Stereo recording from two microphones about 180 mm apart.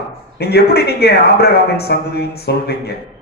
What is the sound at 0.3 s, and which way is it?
A man's voice, 60° left (ahead or behind).